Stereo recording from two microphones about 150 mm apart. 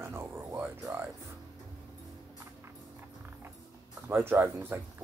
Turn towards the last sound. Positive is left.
turn(degrees=-15)  # may be behind; listen again after turning